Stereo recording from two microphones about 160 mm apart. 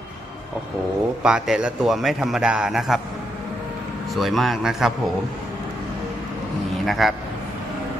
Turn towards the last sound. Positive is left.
turn(degrees=0)  # may be behind; listen again after turning